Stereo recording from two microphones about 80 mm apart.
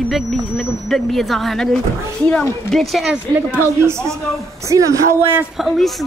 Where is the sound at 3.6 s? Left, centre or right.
Right.